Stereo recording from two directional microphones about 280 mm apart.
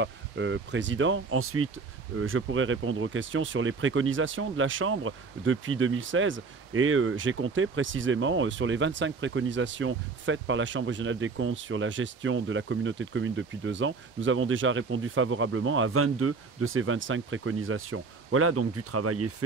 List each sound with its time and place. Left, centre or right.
0.0 s speech: right